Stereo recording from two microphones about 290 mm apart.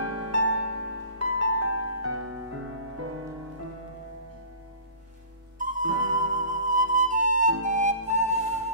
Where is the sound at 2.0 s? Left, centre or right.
Right.